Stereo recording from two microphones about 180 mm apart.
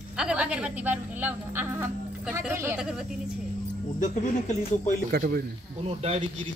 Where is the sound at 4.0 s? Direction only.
40° left (ahead or behind).